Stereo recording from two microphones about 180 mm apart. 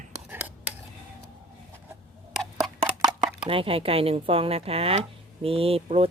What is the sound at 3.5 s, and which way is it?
Speech, 30° right (ahead or behind).